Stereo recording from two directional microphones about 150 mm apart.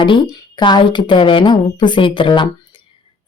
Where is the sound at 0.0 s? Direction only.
30° left (ahead or behind).